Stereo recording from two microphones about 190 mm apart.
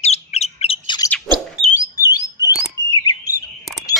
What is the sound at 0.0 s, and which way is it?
Bird, 35° left (ahead or behind).